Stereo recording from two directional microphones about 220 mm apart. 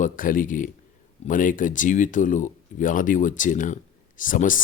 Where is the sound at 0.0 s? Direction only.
40° left (ahead or behind).